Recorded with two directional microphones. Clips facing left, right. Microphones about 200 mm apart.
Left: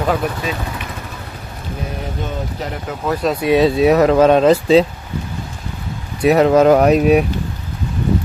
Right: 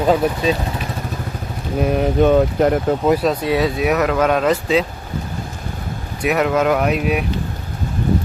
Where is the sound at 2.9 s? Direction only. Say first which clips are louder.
Right 9 dB; 35° right (ahead or behind).